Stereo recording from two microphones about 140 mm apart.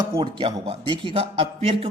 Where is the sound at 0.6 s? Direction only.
35° right (ahead or behind).